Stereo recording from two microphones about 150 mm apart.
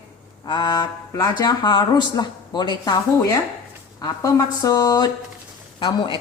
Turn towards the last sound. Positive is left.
turn(degrees=30)  # may be behind; listen again after turning